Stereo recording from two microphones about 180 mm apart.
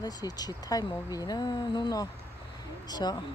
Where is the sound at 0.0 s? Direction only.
20° left (ahead or behind).